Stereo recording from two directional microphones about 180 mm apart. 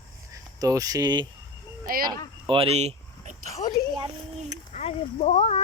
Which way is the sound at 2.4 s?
30° right (ahead or behind).